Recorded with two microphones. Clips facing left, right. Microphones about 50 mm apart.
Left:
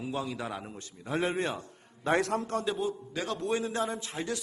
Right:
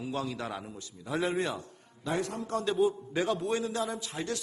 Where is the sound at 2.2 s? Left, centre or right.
Left.